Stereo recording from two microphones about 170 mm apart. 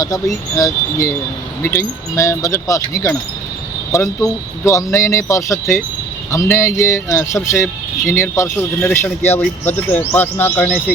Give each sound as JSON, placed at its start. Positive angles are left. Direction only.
{"t": 0.5, "sound": "speech", "side_deg": 20}